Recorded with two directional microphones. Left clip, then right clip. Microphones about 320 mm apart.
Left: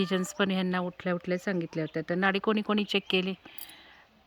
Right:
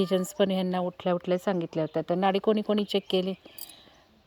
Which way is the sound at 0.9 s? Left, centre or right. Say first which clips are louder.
Right 4 dB; centre.